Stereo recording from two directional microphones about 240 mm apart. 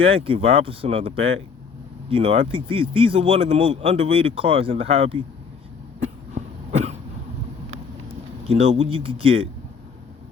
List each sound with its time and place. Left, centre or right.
0.0 s speech: right
6.0 s cough: right
8.4 s speech: right